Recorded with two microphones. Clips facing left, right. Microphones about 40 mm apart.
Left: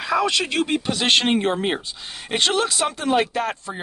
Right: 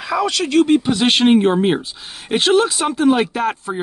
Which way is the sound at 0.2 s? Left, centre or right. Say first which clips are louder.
Right 5 dB; left.